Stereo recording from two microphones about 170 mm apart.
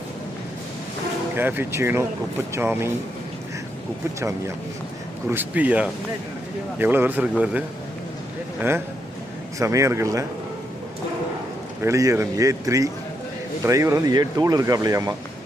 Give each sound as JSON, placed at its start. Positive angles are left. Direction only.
{"t": 1.4, "sound": "speech", "side_deg": -10}
{"t": 5.3, "sound": "a man's voice", "side_deg": -10}
{"t": 11.8, "sound": "speech", "side_deg": -20}